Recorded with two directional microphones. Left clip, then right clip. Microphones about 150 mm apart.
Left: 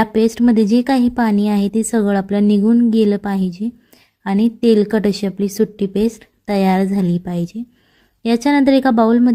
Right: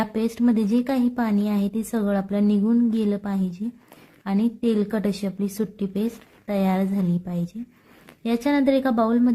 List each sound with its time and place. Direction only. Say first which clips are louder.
0.0 s speech: left 9 dB; 30° left (ahead or behind)